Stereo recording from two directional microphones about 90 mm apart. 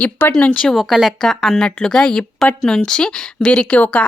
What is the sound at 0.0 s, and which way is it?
Speech, 20° left (ahead or behind).